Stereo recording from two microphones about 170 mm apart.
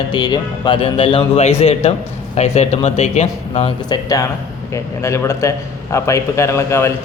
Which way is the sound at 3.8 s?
20° left (ahead or behind).